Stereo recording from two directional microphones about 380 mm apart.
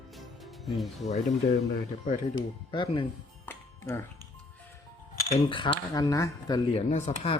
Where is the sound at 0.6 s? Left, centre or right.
Centre.